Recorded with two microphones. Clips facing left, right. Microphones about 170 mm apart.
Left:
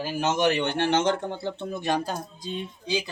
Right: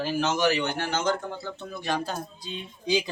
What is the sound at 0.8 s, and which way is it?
Speech, 25° left (ahead or behind).